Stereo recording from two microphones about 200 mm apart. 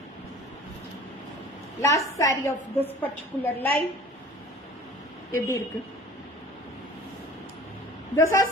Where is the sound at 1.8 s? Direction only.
15° left (ahead or behind).